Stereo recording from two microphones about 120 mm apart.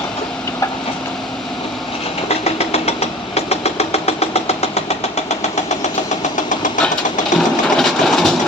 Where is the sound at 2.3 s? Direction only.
60° left (ahead or behind).